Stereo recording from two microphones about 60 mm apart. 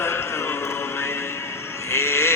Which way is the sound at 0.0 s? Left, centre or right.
Left.